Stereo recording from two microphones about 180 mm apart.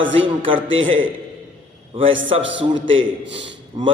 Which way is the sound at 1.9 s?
30° right (ahead or behind).